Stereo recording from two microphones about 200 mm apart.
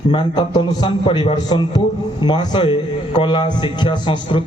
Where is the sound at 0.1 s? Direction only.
20° left (ahead or behind).